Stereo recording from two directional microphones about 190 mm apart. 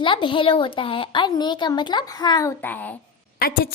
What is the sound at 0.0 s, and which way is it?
Speech, 25° left (ahead or behind).